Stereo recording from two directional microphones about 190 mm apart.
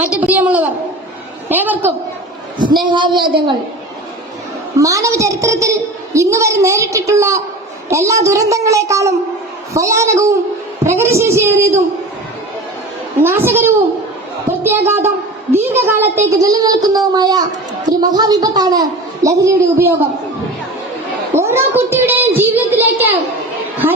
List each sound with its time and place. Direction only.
0.0 s a woman's voice: 10° right (ahead or behind)
2.8 s a child's voice: 25° right (ahead or behind)
4.8 s a woman's voice: 15° right (ahead or behind)
13.2 s a woman's voice: 10° right (ahead or behind)
21.3 s a sound: 15° right (ahead or behind)